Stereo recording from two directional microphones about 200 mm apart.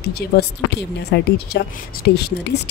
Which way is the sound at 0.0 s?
55° left (ahead or behind).